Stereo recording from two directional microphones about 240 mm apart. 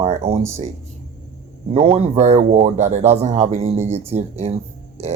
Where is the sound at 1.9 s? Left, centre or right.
Right.